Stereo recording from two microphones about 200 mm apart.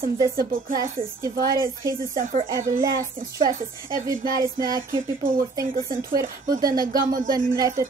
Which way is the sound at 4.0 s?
45° right (ahead or behind).